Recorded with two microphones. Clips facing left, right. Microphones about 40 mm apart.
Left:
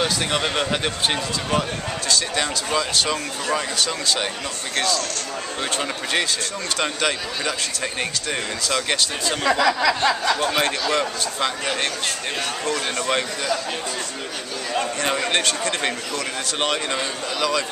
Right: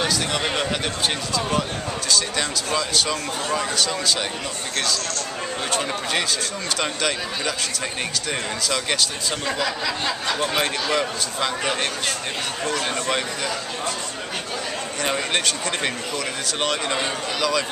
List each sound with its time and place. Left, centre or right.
0.3 s speech: centre
6.8 s speech: centre
9.4 s speech: left
10.4 s speech: centre
15.0 s speech: centre